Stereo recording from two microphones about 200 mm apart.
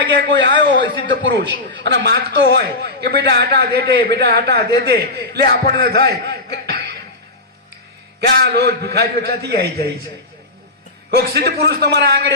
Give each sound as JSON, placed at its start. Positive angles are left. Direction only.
{"t": 0.1, "sound": "a man's voice", "side_deg": -60}
{"t": 0.6, "sound": "a sound", "side_deg": -60}
{"t": 1.3, "sound": "a man's voice", "side_deg": -60}
{"t": 8.5, "sound": "a man's voice", "side_deg": -55}
{"t": 11.1, "sound": "a man's voice", "side_deg": -55}